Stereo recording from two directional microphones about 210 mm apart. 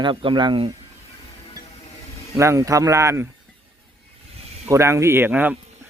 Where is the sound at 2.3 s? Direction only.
15° right (ahead or behind).